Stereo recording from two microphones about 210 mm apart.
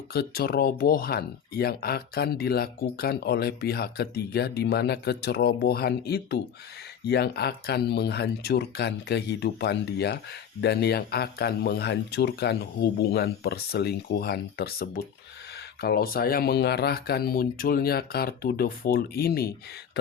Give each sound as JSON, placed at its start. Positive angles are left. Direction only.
{"t": 0.1, "sound": "speech", "side_deg": 50}